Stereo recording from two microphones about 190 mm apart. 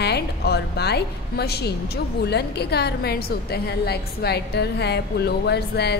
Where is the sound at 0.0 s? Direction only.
60° left (ahead or behind).